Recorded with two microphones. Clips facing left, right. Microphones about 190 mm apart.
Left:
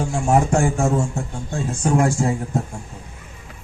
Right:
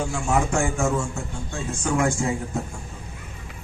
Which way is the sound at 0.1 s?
40° left (ahead or behind).